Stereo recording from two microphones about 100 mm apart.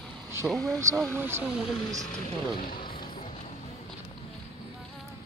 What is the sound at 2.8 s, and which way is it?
Music, 55° left (ahead or behind).